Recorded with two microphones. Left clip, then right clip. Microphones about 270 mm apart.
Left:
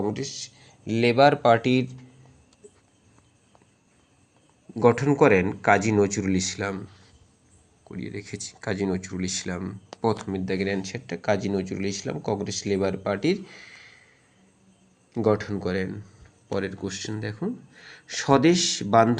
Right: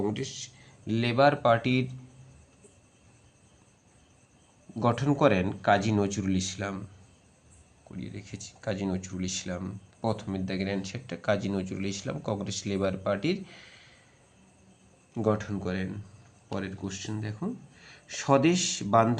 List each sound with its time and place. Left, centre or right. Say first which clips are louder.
0.0 s speech: left 3 dB; centre
4.7 s speech: left 7 dB; centre
7.9 s speech: left 7 dB; centre
15.1 s speech: left 5 dB; centre